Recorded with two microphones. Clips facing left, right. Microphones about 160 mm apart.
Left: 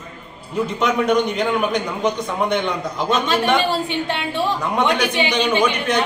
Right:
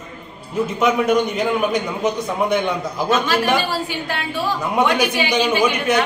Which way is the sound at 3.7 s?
25° left (ahead or behind).